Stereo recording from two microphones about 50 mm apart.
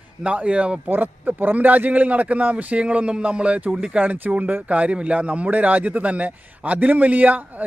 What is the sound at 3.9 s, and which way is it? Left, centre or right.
Speech, right.